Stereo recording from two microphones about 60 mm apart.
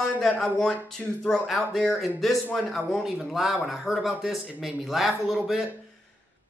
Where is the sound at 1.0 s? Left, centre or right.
Centre.